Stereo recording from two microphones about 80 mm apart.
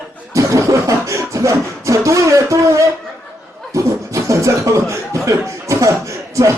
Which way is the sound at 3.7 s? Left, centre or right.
Right.